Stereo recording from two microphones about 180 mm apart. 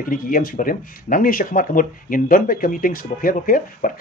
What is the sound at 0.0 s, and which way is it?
Speech, 50° left (ahead or behind).